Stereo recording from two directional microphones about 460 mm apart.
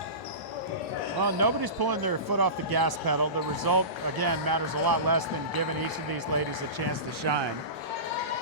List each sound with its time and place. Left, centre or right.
1.2 s speech: right
7.3 s speech: right